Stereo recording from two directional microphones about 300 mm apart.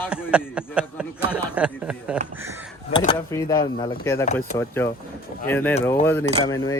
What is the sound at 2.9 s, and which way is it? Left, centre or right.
Speech, centre.